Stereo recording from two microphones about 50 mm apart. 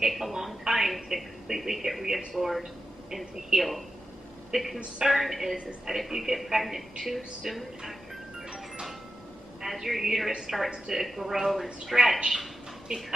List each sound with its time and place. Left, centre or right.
0.0 s a sound: centre
3.5 s a woman's voice: centre
5.0 s a woman's voice: centre
9.6 s a woman's voice: centre